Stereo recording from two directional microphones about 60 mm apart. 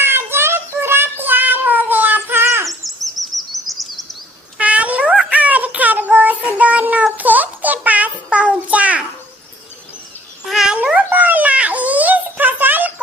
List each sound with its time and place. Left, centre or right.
0.0 s child singing: right
1.2 s cat: right
2.6 s bird vocalization: centre
4.6 s child singing: right
7.2 s a sound: right
10.4 s dog: centre
10.9 s a sound: right